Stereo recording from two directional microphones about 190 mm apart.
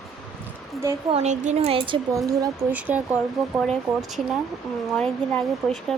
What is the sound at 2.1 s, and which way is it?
Speech, 20° right (ahead or behind).